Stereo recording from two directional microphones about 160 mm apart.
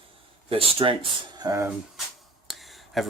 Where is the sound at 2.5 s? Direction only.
Centre (ahead or behind).